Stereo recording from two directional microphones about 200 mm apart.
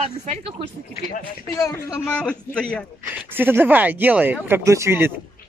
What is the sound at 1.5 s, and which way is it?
A man's voice, 15° left (ahead or behind).